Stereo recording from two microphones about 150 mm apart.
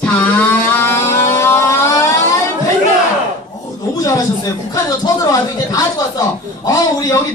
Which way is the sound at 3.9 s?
25° left (ahead or behind).